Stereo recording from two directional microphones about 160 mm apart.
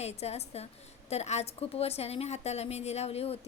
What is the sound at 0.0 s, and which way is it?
A woman's voice, 40° left (ahead or behind).